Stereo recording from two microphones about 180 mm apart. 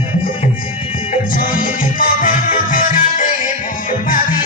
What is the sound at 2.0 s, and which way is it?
Music, 50° left (ahead or behind).